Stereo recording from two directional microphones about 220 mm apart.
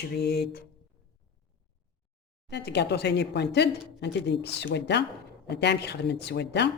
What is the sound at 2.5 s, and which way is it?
Speech, 50° left (ahead or behind).